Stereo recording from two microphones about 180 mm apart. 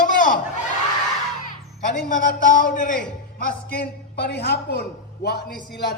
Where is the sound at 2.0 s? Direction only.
45° left (ahead or behind).